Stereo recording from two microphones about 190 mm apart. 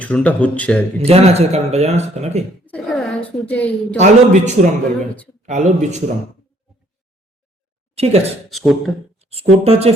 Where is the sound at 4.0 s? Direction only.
40° right (ahead or behind).